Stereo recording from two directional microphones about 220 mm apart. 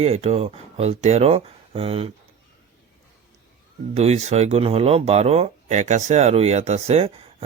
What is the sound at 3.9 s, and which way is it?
Speech, 30° right (ahead or behind).